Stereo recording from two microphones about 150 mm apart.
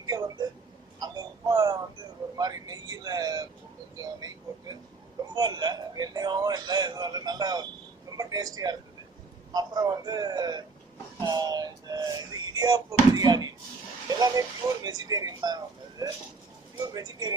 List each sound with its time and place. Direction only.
0.0 s a sound: 25° right (ahead or behind)
2.4 s speech: 25° right (ahead or behind)
5.3 s speech: 25° right (ahead or behind)
11.2 s music: 25° right (ahead or behind)
14.1 s speech: 25° right (ahead or behind)